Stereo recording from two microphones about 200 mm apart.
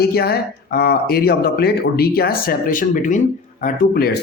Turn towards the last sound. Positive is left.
turn(degrees=50)  # may be behind; listen again after turning